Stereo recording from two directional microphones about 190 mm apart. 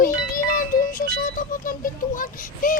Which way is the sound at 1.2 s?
45° left (ahead or behind).